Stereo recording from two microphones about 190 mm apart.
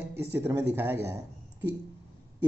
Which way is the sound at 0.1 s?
10° right (ahead or behind).